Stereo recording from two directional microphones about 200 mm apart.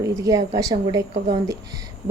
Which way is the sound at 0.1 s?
15° right (ahead or behind).